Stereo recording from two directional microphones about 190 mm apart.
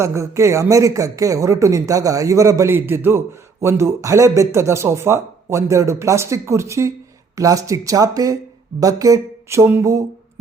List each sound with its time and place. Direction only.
0.0 s speech: 15° right (ahead or behind)